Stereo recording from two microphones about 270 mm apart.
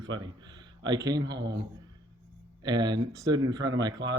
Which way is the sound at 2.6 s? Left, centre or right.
Centre.